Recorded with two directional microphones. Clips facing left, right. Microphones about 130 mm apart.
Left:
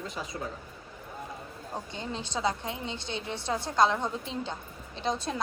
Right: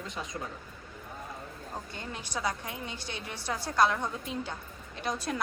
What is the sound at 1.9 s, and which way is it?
A woman's voice, 25° left (ahead or behind).